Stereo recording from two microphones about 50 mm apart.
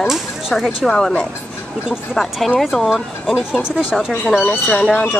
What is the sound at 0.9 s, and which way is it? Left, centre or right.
Speech, centre.